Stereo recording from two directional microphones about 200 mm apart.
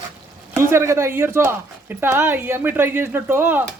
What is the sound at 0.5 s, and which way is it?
Speech, 15° right (ahead or behind).